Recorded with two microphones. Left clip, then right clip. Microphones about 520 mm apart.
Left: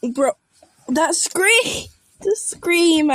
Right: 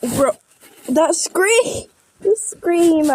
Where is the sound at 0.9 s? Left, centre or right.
Right.